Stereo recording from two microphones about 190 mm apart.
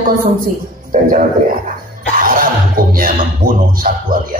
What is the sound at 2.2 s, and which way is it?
A woman's voice, 50° right (ahead or behind).